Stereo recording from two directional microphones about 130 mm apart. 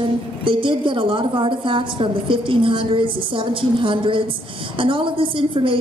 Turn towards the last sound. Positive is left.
turn(degrees=-40)  # may be behind; listen again after turning